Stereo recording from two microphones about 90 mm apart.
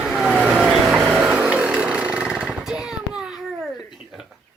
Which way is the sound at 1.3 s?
15° right (ahead or behind).